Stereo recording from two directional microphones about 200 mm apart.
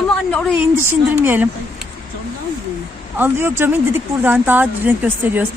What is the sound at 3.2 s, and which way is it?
A woman's voice, 10° right (ahead or behind).